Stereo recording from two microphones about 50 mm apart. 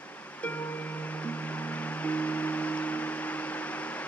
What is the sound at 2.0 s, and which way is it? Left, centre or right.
Music, left.